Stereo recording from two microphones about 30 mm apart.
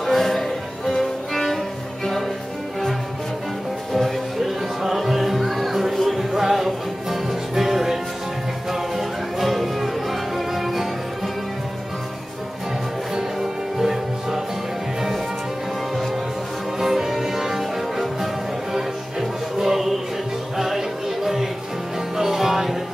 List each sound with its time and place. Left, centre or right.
0.0 s music: centre
3.9 s music: centre
13.1 s music: centre
16.8 s music: centre